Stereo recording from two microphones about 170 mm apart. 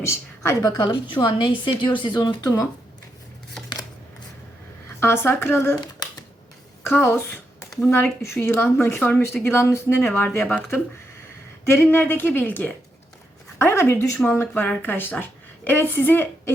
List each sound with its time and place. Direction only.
0.0 s a woman's voice: 15° left (ahead or behind)
4.9 s speech: 15° left (ahead or behind)
6.8 s speech: 15° left (ahead or behind)
11.6 s speech: 15° left (ahead or behind)